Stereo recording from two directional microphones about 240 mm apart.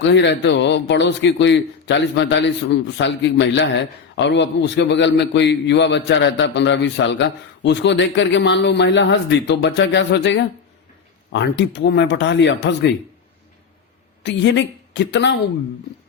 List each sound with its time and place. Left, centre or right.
0.0 s a man's voice: left
14.3 s a man's voice: left